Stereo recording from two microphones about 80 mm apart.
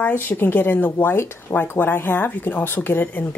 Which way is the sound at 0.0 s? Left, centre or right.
Left.